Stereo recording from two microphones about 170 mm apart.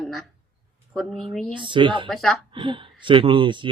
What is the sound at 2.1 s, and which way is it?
Speech, centre (ahead or behind).